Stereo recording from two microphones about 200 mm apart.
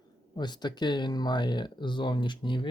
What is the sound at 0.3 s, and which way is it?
Speech, 20° left (ahead or behind).